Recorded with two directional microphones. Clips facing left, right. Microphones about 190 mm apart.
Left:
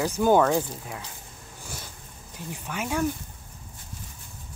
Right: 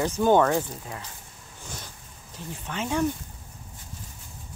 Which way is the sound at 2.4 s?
15° left (ahead or behind).